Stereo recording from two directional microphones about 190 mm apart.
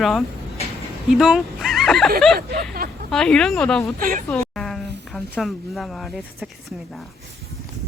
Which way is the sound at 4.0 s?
45° right (ahead or behind).